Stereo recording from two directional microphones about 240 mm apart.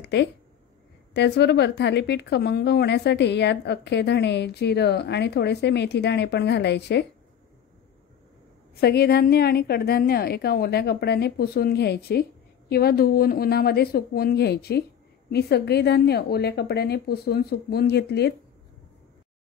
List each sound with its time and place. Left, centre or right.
0.0 s a sound: left
1.1 s a woman's voice: left
8.8 s a woman's voice: left